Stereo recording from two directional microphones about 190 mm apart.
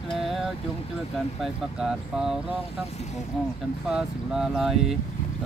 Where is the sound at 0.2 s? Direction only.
Centre (ahead or behind).